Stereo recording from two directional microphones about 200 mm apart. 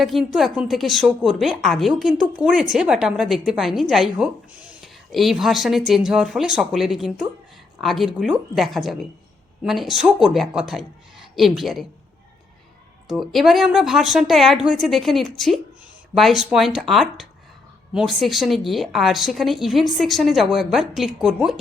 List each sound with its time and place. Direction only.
0.0 s a woman's voice: centre (ahead or behind)
13.1 s a woman's voice: centre (ahead or behind)